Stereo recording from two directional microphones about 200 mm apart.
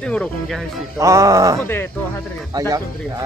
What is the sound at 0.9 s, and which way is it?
Speech, 15° right (ahead or behind).